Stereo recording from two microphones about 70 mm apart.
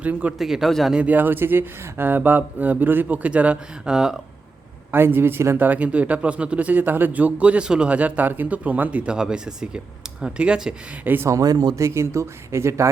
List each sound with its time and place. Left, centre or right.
0.0 s speech: right
0.3 s speech: centre
0.9 s speech: centre
4.9 s speech: right
5.6 s speech: right
9.1 s speech: centre
11.0 s speech: right
11.3 s speech: right
11.8 s speech: right